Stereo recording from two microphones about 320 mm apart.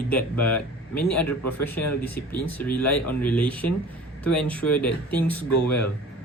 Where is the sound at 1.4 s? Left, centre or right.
Left.